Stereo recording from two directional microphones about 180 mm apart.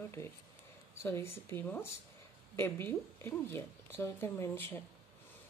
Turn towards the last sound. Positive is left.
turn(degrees=10)  # may be behind; listen again after turning